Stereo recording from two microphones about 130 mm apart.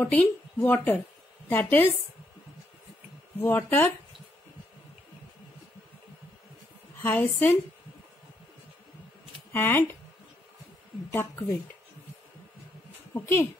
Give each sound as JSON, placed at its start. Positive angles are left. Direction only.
{"t": 0.0, "sound": "a woman's voice", "side_deg": 10}
{"t": 3.3, "sound": "speech", "side_deg": 20}
{"t": 7.0, "sound": "a woman's voice", "side_deg": 15}
{"t": 9.5, "sound": "a woman's voice", "side_deg": 15}
{"t": 13.1, "sound": "speech", "side_deg": 20}